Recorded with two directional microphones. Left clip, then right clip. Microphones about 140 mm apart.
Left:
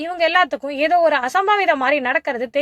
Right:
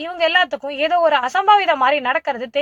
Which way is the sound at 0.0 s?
25° left (ahead or behind).